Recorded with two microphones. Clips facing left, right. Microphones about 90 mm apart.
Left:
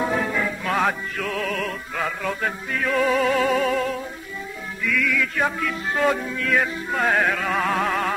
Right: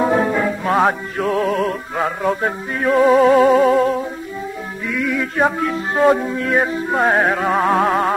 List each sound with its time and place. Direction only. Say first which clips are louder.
0.0 s music: right 7 dB; 30° right (ahead or behind)